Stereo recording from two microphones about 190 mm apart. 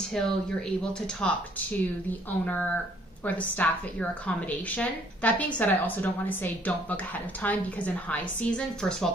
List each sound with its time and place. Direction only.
0.2 s speech: 5° left (ahead or behind)
2.4 s a woman's voice: 5° left (ahead or behind)